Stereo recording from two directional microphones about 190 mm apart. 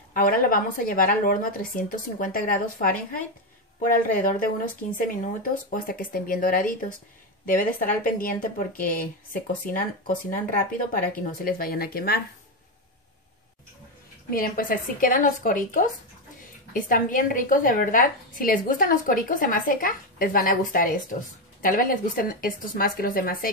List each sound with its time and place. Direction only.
0.1 s a woman's voice: 50° left (ahead or behind)
4.9 s a woman's voice: 45° left (ahead or behind)
14.3 s a woman's voice: 45° left (ahead or behind)